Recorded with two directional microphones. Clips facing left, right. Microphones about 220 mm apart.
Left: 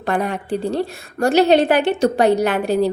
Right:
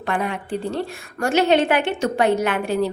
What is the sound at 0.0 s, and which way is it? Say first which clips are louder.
A woman's voice: left 3 dB; 40° left (ahead or behind).